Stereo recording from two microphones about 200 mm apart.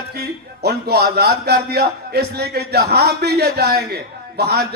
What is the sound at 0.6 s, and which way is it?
A man's voice, 55° right (ahead or behind).